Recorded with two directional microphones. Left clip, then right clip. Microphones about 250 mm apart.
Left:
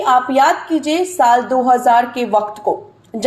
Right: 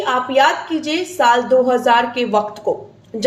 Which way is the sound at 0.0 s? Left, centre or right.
Centre.